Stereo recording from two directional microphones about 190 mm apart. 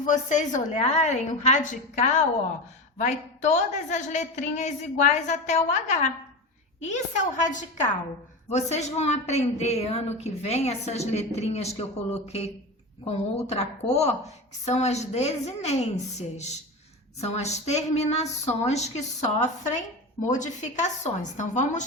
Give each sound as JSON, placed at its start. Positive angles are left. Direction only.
{"t": 0.0, "sound": "a woman's voice", "side_deg": 40}
{"t": 6.7, "sound": "a woman's voice", "side_deg": 40}